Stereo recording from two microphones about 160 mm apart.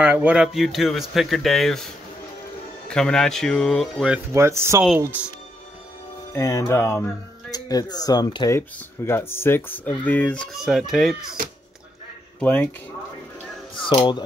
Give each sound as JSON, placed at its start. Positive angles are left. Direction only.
{"t": 0.0, "sound": "speech", "side_deg": -10}
{"t": 2.9, "sound": "speech", "side_deg": 5}
{"t": 4.3, "sound": "speech", "side_deg": -20}
{"t": 6.3, "sound": "speech", "side_deg": 20}
{"t": 8.5, "sound": "speech", "side_deg": 15}
{"t": 12.4, "sound": "speech", "side_deg": 10}
{"t": 13.7, "sound": "speech", "side_deg": 30}